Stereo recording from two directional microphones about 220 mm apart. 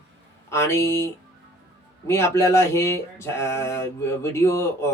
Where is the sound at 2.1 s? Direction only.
10° left (ahead or behind).